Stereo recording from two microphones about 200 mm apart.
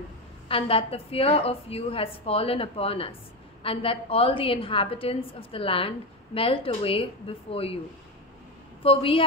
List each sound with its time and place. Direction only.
0.5 s a woman's voice: 30° left (ahead or behind)
8.8 s a woman's voice: 30° left (ahead or behind)